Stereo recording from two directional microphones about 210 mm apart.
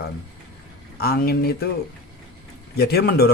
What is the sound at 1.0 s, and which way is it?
Speech, 50° left (ahead or behind).